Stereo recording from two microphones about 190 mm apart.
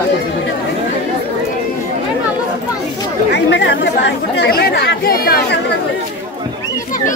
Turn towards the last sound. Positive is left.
turn(degrees=55)  # may be behind; listen again after turning